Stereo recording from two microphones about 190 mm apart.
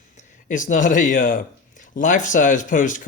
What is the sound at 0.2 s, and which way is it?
Speech, 40° left (ahead or behind).